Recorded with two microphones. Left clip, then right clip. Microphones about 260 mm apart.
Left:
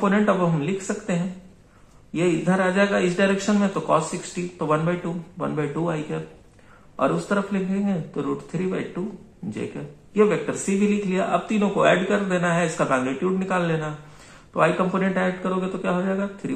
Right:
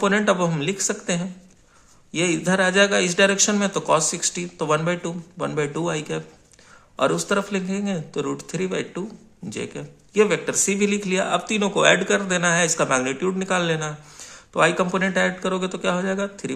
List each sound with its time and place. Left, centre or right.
0.0 s speech: right
2.1 s speech: right
10.1 s speech: right